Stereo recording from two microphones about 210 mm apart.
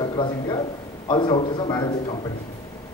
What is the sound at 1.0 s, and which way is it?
Speech, 20° left (ahead or behind).